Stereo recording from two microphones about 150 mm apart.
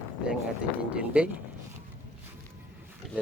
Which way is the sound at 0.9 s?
10° right (ahead or behind).